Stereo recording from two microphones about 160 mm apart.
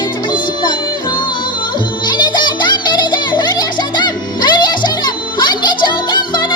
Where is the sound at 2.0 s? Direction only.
25° left (ahead or behind).